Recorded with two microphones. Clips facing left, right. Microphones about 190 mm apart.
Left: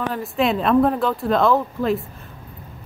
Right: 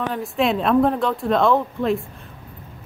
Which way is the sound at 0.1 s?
Centre (ahead or behind).